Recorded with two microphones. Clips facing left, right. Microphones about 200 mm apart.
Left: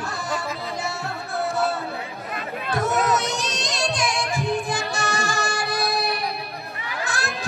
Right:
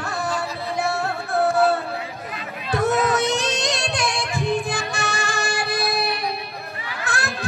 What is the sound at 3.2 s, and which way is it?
Music, 60° right (ahead or behind).